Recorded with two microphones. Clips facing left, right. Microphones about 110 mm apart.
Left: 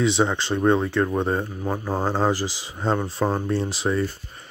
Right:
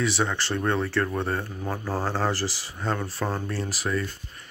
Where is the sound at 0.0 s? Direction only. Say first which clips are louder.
Left 5 dB; 20° left (ahead or behind).